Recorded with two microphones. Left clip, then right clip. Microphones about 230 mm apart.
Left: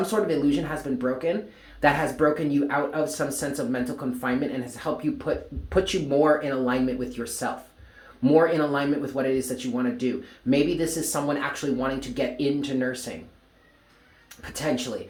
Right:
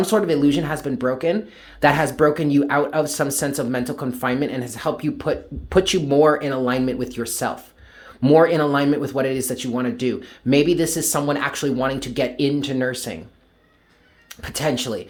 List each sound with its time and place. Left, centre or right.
0.0 s speech: right
14.3 s speech: right